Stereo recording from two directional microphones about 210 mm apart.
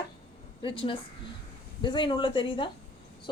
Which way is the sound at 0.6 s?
25° left (ahead or behind).